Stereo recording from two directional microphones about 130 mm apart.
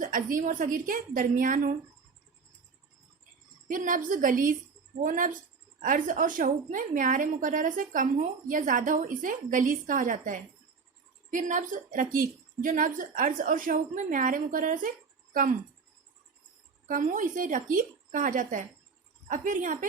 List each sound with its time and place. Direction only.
0.0 s a woman's voice: 90° right
3.7 s a woman's voice: 90° right
16.9 s a woman's voice: 90° right